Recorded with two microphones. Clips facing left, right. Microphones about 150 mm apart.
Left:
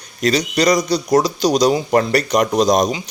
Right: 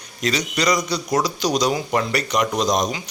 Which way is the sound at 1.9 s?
45° left (ahead or behind).